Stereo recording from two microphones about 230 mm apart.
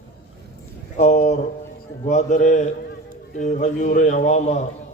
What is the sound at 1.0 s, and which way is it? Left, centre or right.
A man's voice, left.